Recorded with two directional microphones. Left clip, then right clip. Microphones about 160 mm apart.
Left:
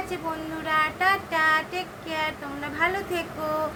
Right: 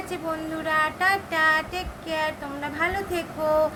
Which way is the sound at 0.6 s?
20° right (ahead or behind).